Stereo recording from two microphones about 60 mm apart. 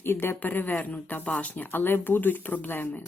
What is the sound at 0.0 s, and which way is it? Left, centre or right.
Speech, left.